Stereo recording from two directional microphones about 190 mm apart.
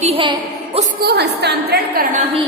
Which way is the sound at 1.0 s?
60° right (ahead or behind).